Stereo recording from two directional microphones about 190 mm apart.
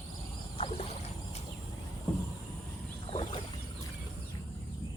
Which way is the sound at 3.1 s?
30° left (ahead or behind).